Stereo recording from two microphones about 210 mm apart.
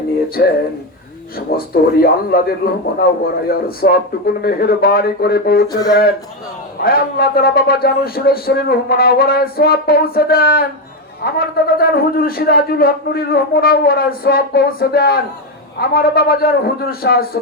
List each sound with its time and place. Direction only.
0.4 s a man's voice: 50° left (ahead or behind)
1.5 s a man's voice: 45° left (ahead or behind)